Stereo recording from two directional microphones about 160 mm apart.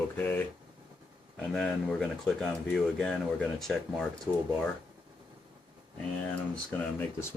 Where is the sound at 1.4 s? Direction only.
5° left (ahead or behind).